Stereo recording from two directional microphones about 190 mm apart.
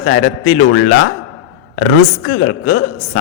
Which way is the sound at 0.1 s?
40° left (ahead or behind).